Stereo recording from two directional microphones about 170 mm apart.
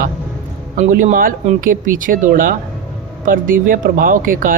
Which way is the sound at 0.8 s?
50° right (ahead or behind).